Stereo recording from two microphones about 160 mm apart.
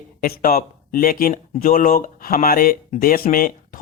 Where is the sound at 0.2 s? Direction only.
60° left (ahead or behind).